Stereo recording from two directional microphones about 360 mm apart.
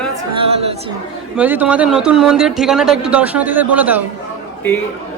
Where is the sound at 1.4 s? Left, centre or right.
Centre.